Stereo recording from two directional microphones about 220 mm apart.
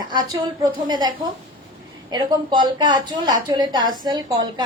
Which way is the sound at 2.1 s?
20° right (ahead or behind).